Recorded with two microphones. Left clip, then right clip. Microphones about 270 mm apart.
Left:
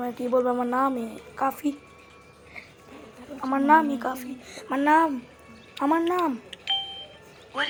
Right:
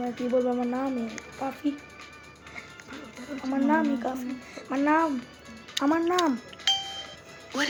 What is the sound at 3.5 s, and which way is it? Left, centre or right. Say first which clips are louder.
Speech: left 6 dB; left.